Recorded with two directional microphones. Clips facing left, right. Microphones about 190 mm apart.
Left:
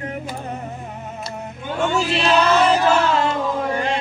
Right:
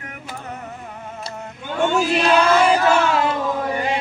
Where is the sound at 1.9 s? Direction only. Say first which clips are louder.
Right 1 dB; 10° right (ahead or behind).